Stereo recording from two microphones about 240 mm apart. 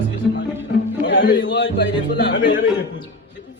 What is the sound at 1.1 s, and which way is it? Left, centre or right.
Speech, left.